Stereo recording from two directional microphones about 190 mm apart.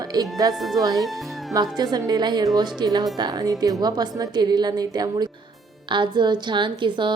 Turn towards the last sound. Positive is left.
turn(degrees=-25)  # may be behind; listen again after turning